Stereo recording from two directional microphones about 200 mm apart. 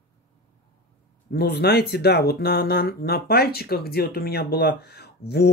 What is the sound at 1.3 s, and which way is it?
Speech, 55° left (ahead or behind).